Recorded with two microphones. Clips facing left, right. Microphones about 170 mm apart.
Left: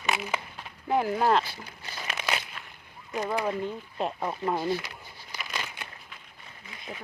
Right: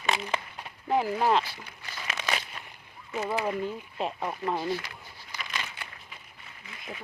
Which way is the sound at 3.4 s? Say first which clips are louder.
Even; 5° right (ahead or behind).